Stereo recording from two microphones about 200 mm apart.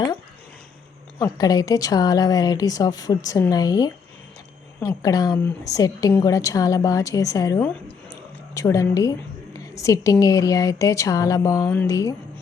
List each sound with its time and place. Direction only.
1.2 s a woman's voice: 20° left (ahead or behind)